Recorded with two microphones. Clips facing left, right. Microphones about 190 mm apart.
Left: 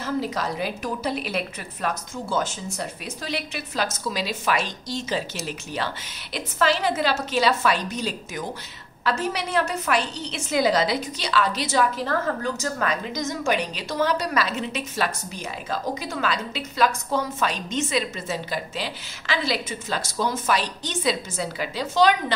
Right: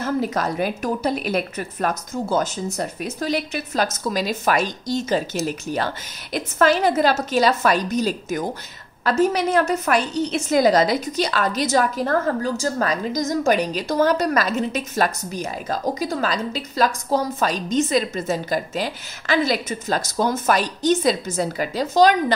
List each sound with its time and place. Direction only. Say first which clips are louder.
0.0 s a woman's voice: right 4 dB; 50° right (ahead or behind)